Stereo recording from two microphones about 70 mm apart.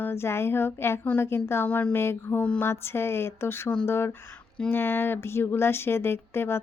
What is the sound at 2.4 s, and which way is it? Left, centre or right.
Speech, left.